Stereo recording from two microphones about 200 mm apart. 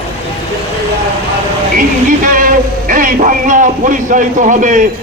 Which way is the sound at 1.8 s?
45° right (ahead or behind).